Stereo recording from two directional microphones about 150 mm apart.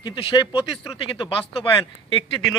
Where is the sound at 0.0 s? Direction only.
35° left (ahead or behind).